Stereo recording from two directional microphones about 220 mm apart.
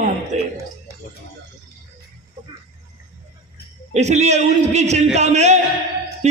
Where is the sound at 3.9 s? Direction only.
30° right (ahead or behind).